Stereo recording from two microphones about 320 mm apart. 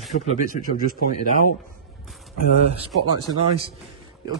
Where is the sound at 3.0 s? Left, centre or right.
Right.